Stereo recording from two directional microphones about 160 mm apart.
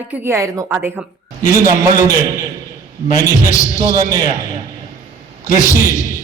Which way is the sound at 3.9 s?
20° right (ahead or behind).